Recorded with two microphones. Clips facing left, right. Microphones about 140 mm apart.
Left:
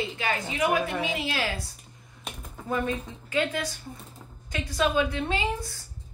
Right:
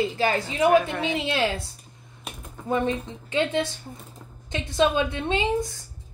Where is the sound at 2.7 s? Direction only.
25° right (ahead or behind).